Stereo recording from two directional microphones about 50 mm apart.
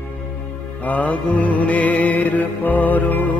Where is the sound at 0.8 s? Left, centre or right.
Left.